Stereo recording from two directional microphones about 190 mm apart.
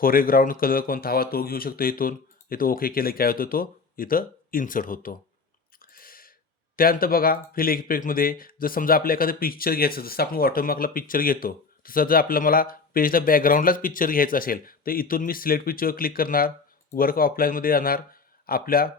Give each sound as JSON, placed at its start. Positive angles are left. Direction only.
{"t": 0.0, "sound": "speech", "side_deg": 50}
{"t": 5.8, "sound": "a sound", "side_deg": 50}
{"t": 6.7, "sound": "speech", "side_deg": 50}